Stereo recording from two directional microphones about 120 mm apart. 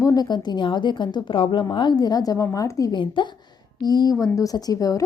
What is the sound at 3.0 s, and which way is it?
A woman's voice, 45° left (ahead or behind).